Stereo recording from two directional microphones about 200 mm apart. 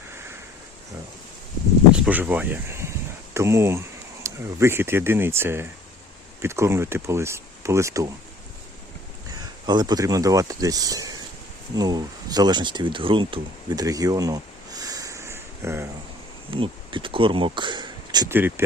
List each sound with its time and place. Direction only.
1.9 s speech: 10° right (ahead or behind)
9.6 s speech: 20° right (ahead or behind)
16.5 s speech: 25° right (ahead or behind)